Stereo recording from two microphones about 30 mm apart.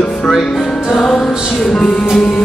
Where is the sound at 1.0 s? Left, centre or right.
Centre.